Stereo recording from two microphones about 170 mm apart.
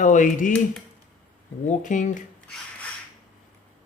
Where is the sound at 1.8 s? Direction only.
50° left (ahead or behind).